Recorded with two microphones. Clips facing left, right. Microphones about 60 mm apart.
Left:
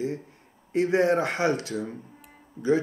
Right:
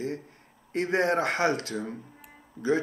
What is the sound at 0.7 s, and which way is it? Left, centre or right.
Speech, right.